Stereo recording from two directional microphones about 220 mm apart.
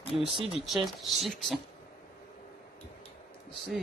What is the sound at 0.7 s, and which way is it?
Speech, centre (ahead or behind).